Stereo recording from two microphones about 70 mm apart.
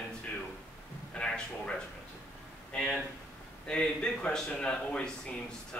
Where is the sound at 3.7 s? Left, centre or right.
Centre.